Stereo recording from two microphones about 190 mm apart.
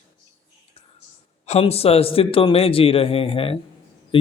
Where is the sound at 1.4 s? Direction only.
35° left (ahead or behind).